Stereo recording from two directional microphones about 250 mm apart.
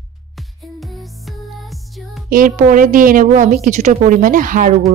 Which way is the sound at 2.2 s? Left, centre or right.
Right.